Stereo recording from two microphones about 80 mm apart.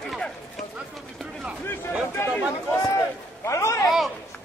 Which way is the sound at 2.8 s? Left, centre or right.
Left.